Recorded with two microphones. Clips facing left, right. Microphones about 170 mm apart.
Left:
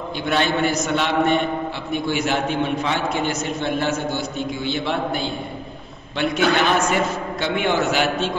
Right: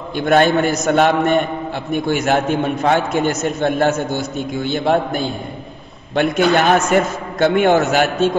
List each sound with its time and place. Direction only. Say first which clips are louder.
0.2 s a man's voice: right 7 dB; 50° right (ahead or behind)